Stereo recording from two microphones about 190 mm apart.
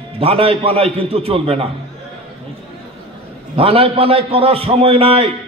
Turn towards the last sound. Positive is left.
turn(degrees=-30)  # may be behind; listen again after turning